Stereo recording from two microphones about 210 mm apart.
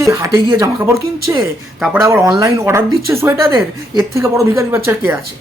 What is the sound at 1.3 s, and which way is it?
Speech, centre (ahead or behind).